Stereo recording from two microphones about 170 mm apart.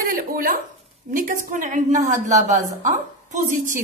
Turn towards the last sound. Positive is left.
turn(degrees=-50)  # may be behind; listen again after turning